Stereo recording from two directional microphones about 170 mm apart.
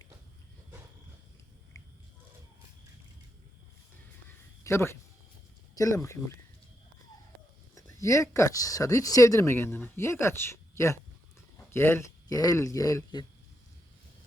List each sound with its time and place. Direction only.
1.7 s a sound: 20° left (ahead or behind)
4.6 s speech: 15° left (ahead or behind)
8.0 s speech: 20° left (ahead or behind)